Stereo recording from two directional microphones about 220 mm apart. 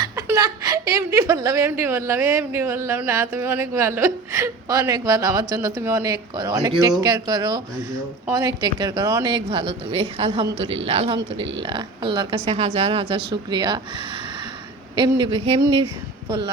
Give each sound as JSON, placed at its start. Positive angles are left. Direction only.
{"t": 0.0, "sound": "a woman's voice", "side_deg": -15}
{"t": 14.9, "sound": "speech", "side_deg": -20}